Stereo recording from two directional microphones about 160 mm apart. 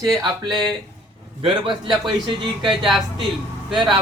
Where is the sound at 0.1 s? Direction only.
25° right (ahead or behind).